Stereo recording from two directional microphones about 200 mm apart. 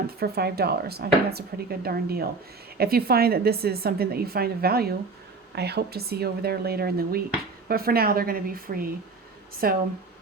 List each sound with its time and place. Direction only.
0.2 s a woman's voice: 50° right (ahead or behind)